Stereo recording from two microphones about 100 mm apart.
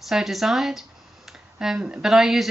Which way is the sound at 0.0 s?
Centre (ahead or behind).